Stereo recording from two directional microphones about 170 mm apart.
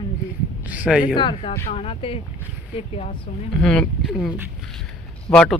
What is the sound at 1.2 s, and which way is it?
Speech, 30° left (ahead or behind).